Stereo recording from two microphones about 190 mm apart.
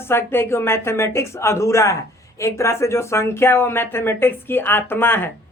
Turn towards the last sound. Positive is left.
turn(degrees=10)  # may be behind; listen again after turning